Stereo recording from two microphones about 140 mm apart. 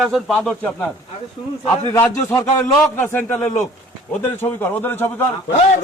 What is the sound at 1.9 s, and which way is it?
A man's voice, 20° left (ahead or behind).